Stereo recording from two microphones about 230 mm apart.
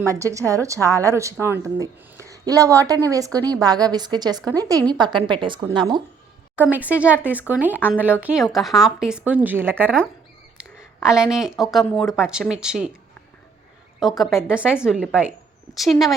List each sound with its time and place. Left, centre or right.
0.1 s a woman's voice: centre
6.6 s speech: centre
14.0 s speech: centre